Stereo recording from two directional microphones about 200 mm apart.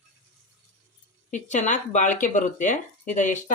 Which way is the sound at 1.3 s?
35° left (ahead or behind).